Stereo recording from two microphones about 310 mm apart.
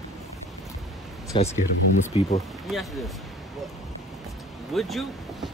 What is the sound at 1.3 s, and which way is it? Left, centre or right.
Speech, centre.